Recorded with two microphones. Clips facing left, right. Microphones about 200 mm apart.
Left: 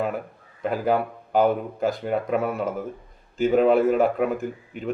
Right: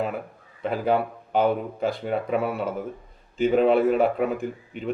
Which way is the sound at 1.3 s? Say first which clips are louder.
Left 2 dB; 45° left (ahead or behind).